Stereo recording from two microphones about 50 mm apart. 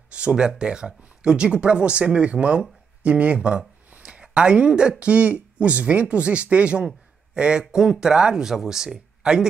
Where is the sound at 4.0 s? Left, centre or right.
Right.